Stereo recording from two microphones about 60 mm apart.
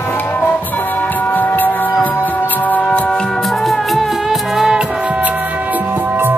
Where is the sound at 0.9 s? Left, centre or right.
Left.